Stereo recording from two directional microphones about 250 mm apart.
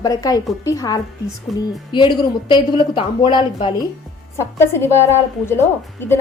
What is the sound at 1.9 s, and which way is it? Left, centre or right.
A woman's voice, centre.